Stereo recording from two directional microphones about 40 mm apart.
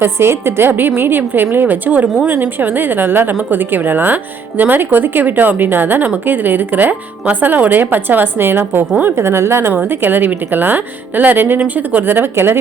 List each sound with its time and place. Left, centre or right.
0.0 s a woman's voice: right
0.7 s a woman's voice: right
9.2 s a woman's voice: right
9.7 s a woman's voice: right
11.6 s a woman's voice: right
12.0 s speech: right